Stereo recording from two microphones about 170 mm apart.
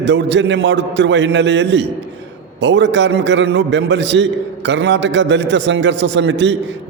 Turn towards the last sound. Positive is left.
turn(degrees=-90)